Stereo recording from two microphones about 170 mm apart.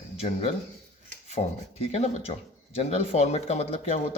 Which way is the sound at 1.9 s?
40° left (ahead or behind).